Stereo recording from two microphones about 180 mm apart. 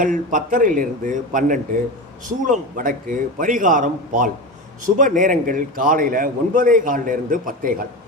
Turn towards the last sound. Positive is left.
turn(degrees=-50)  # may be behind; listen again after turning